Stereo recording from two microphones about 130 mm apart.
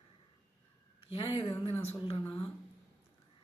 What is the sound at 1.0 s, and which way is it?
Speech, 45° left (ahead or behind).